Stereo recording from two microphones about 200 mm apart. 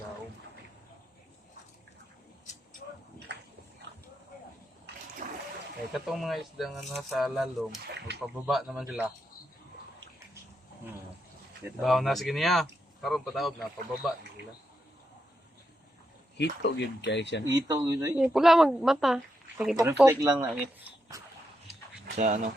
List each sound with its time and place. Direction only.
3.3 s dog: 60° right (ahead or behind)
5.2 s a sound: 40° right (ahead or behind)
5.9 s speech: centre (ahead or behind)
7.9 s speech: 60° right (ahead or behind)
8.4 s speech: centre (ahead or behind)
11.8 s speech: centre (ahead or behind)
16.4 s speech: 60° left (ahead or behind)
17.4 s speech: 20° right (ahead or behind)
18.2 s speech: centre (ahead or behind)
20.1 s speech: 20° right (ahead or behind)
22.0 s speech: 45° right (ahead or behind)